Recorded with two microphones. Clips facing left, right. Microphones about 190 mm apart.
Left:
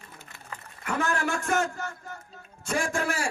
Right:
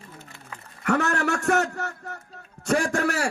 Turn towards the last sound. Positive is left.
turn(degrees=-70)  # may be behind; listen again after turning